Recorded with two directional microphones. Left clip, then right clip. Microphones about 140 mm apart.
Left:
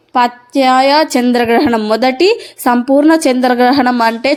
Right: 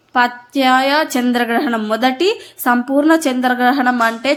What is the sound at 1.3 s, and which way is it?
Speech, 35° left (ahead or behind).